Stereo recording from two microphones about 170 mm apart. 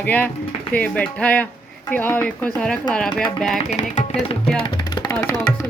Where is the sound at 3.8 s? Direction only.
40° left (ahead or behind).